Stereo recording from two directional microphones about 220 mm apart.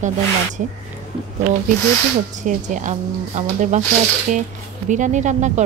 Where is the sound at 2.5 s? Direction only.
35° right (ahead or behind).